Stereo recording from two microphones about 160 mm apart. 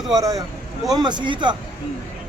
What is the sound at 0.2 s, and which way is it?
Speech, 20° right (ahead or behind).